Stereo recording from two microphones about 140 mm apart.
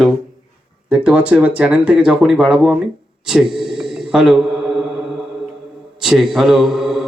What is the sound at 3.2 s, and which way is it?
Mantra, centre (ahead or behind).